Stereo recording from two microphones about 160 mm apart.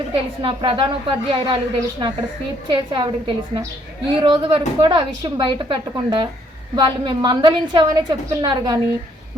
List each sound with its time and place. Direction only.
0.1 s a woman's voice: 35° right (ahead or behind)